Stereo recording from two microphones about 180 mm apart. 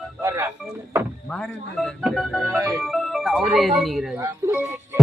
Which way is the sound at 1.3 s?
5° left (ahead or behind).